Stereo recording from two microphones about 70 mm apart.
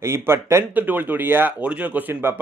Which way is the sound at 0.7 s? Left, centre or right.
Right.